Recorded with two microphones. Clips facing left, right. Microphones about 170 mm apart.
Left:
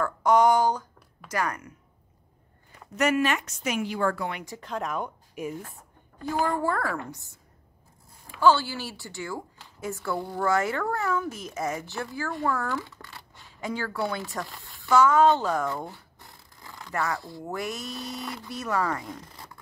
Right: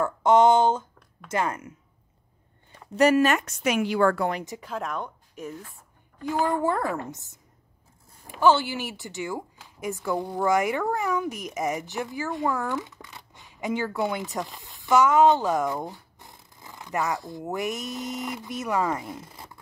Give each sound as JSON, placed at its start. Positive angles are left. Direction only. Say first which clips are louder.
{"t": 0.0, "sound": "a woman's voice", "louder": "right 2 dB", "side_deg": -25}
{"t": 3.0, "sound": "speech", "louder": "right 5 dB", "side_deg": -40}
{"t": 3.6, "sound": "speech", "louder": "right 5 dB", "side_deg": -80}
{"t": 4.5, "sound": "speech", "louder": "even", "side_deg": -10}
{"t": 6.3, "sound": "a woman's voice", "louder": "right 2 dB", "side_deg": -20}
{"t": 8.4, "sound": "a woman's voice", "louder": "right 1 dB", "side_deg": -20}